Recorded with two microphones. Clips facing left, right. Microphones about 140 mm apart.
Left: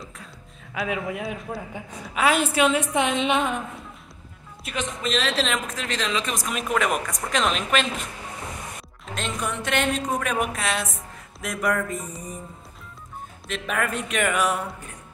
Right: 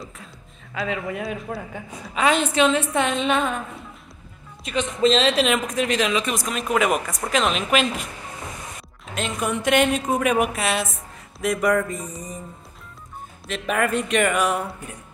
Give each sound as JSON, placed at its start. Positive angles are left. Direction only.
{"t": 0.8, "sound": "a woman's voice", "side_deg": 5}
{"t": 4.6, "sound": "speech", "side_deg": 5}
{"t": 5.0, "sound": "speech", "side_deg": -25}
{"t": 5.4, "sound": "speech", "side_deg": -15}
{"t": 9.0, "sound": "a woman's voice", "side_deg": -5}
{"t": 13.5, "sound": "speech", "side_deg": 0}